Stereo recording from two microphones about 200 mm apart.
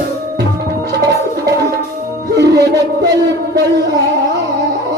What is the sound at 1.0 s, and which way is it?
Music, 20° right (ahead or behind).